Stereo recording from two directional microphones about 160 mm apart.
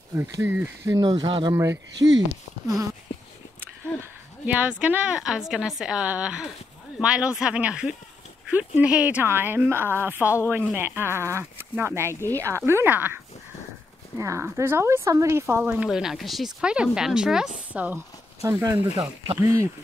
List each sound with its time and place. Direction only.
0.1 s speech: 15° right (ahead or behind)
0.8 s speech: 20° right (ahead or behind)
1.5 s speech: 15° right (ahead or behind)